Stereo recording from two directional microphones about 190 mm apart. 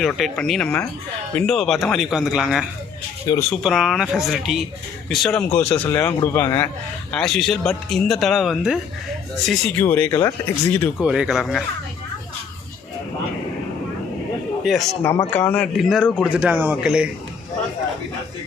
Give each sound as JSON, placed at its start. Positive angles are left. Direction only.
{"t": 0.0, "sound": "speech", "side_deg": 5}
{"t": 3.3, "sound": "speech", "side_deg": 20}
{"t": 3.6, "sound": "speech", "side_deg": 0}
{"t": 10.9, "sound": "speech", "side_deg": -5}
{"t": 14.6, "sound": "a man's voice", "side_deg": 0}
{"t": 15.0, "sound": "speech", "side_deg": 15}
{"t": 16.3, "sound": "a man's voice", "side_deg": -10}